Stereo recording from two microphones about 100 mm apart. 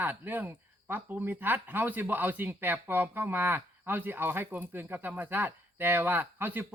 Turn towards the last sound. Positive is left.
turn(degrees=-20)  # may be behind; listen again after turning